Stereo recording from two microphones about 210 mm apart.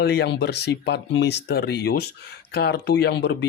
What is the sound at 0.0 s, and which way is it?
Speech, 50° left (ahead or behind).